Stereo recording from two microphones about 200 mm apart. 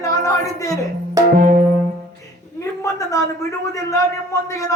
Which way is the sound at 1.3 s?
45° right (ahead or behind).